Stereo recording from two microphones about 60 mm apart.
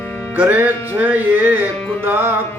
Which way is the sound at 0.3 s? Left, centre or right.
Right.